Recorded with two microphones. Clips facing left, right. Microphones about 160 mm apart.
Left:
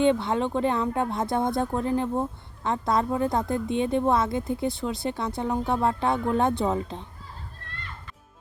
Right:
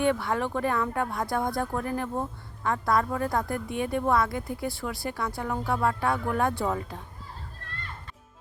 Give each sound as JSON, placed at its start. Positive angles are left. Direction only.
{"t": 0.0, "sound": "speech", "side_deg": 20}